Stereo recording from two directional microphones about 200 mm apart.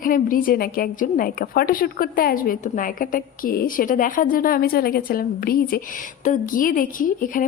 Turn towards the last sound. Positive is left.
turn(degrees=45)  # may be behind; listen again after turning